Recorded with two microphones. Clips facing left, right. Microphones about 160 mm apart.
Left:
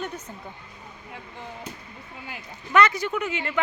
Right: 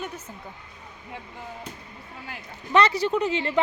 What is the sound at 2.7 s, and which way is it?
Speech, 30° right (ahead or behind).